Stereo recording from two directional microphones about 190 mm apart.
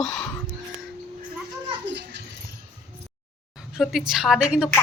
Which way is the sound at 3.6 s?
Centre (ahead or behind).